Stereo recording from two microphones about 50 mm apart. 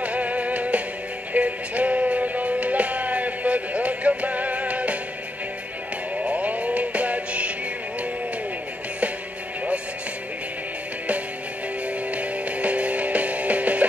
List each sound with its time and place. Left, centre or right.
0.0 s music: right
6.2 s music: right
12.1 s music: right